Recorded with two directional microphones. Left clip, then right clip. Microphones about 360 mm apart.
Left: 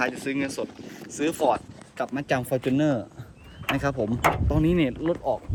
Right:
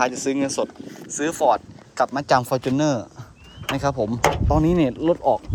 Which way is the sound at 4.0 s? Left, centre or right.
Centre.